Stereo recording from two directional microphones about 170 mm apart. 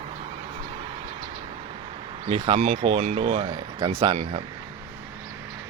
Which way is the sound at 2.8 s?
40° right (ahead or behind).